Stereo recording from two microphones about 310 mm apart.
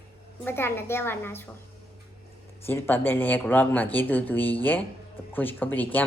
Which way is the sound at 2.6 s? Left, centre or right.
Centre.